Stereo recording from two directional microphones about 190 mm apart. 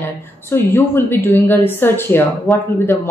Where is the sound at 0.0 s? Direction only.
10° left (ahead or behind).